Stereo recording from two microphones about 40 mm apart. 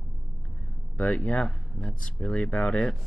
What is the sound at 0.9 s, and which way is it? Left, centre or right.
Speech, left.